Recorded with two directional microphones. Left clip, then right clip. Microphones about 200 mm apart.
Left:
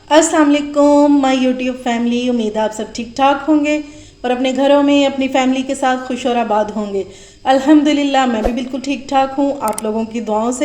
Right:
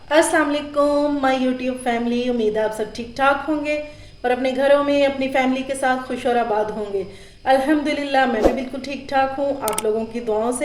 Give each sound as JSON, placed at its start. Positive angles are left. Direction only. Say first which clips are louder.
{"t": 0.1, "sound": "a woman's voice", "louder": "left 6 dB", "side_deg": 20}
{"t": 10.2, "sound": "a woman's voice", "louder": "left 4 dB", "side_deg": 20}